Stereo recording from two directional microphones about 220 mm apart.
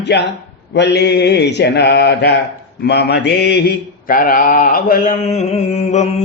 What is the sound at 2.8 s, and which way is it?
Mantra, 50° left (ahead or behind).